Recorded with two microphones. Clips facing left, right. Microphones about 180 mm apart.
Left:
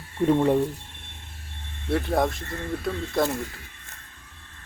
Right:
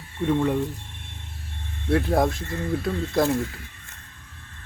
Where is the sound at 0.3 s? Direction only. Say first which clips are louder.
Left 2 dB; 30° left (ahead or behind).